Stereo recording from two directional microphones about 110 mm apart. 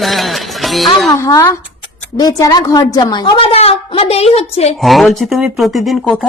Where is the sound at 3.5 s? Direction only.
65° left (ahead or behind).